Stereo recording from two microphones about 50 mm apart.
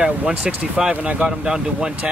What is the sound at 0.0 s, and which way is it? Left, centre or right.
Speech, right.